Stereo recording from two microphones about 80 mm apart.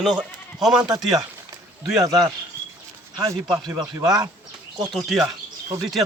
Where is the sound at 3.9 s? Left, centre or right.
Right.